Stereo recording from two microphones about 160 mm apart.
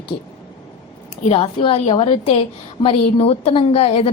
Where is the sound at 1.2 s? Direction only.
40° left (ahead or behind).